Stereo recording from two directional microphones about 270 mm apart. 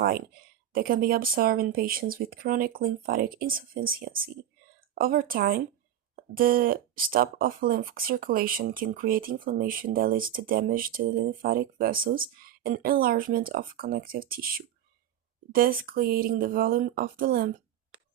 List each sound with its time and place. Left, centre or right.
0.7 s speech: right
4.9 s speech: right
15.5 s speech: right